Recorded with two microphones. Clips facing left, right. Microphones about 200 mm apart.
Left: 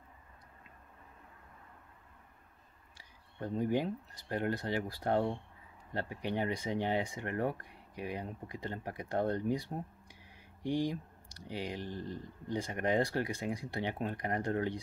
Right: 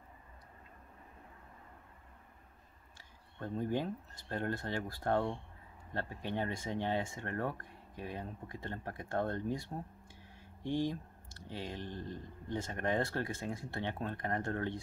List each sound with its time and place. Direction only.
3.3 s speech: 15° left (ahead or behind)
10.6 s speech: 15° left (ahead or behind)